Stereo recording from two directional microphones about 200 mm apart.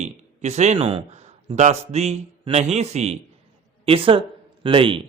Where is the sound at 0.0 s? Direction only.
35° right (ahead or behind).